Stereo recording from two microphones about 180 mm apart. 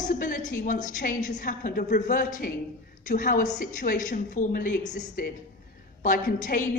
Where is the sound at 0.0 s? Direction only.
50° left (ahead or behind).